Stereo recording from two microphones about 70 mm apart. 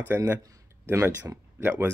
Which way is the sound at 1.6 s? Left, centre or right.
Right.